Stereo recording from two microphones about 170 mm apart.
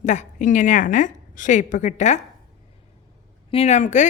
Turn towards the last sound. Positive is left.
turn(degrees=45)  # may be behind; listen again after turning